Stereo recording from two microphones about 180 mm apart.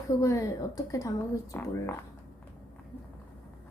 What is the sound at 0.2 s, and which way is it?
A woman's voice, 20° left (ahead or behind).